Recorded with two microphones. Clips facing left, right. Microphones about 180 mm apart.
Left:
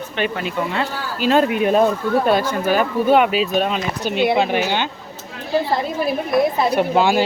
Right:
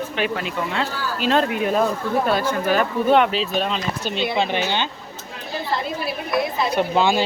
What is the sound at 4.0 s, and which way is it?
Speech, 10° left (ahead or behind).